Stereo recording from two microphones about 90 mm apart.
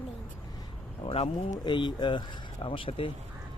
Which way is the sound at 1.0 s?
75° left (ahead or behind).